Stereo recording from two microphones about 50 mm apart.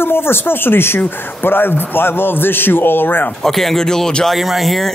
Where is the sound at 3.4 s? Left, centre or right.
Centre.